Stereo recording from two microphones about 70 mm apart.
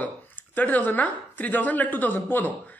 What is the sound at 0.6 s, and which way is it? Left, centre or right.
Speech, left.